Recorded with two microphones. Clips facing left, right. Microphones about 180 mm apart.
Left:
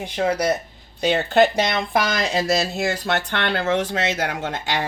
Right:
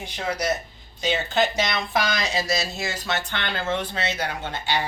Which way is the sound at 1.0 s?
60° left (ahead or behind).